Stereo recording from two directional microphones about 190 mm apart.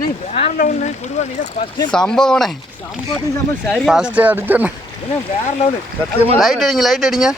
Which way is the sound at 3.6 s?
Centre (ahead or behind).